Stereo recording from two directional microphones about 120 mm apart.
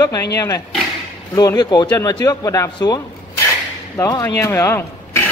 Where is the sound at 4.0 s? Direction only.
25° left (ahead or behind).